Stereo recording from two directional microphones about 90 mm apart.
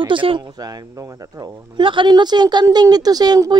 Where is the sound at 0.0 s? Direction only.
70° right (ahead or behind).